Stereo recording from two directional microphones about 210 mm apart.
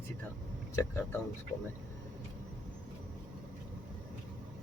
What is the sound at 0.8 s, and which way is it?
Speech, 10° left (ahead or behind).